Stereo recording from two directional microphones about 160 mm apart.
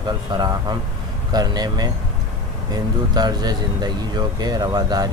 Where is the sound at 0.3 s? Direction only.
25° right (ahead or behind).